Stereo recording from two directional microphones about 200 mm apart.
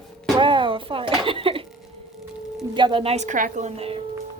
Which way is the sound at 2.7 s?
25° right (ahead or behind).